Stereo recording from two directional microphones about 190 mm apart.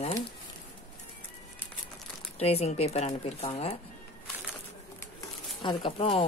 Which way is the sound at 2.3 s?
35° left (ahead or behind).